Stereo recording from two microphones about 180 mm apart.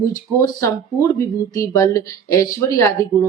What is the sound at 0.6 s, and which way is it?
A woman's voice, 15° left (ahead or behind).